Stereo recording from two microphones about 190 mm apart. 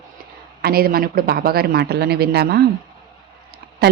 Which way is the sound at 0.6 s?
50° right (ahead or behind).